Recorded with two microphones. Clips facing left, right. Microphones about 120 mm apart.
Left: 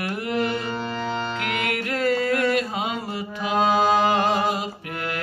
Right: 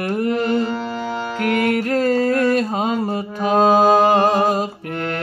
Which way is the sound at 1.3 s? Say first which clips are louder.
Right 8 dB; 40° right (ahead or behind).